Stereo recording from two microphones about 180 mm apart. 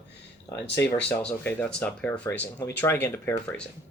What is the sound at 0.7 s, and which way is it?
Speech, 10° left (ahead or behind).